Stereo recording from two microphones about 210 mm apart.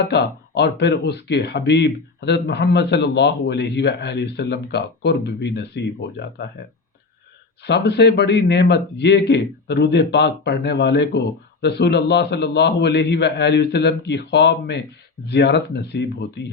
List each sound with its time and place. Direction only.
0.0 s a man's voice: 50° left (ahead or behind)
7.6 s a man's voice: 50° left (ahead or behind)